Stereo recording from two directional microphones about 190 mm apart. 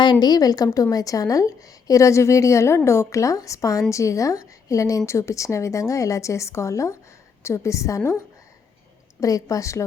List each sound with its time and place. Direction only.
0.0 s a woman's voice: 20° left (ahead or behind)
9.2 s a woman's voice: 20° left (ahead or behind)